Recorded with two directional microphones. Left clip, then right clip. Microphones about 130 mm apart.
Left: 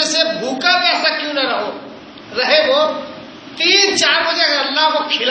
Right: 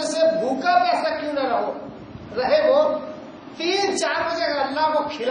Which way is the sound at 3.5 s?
30° right (ahead or behind).